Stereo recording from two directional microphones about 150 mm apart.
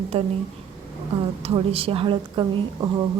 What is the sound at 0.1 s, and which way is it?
Speech, 40° right (ahead or behind).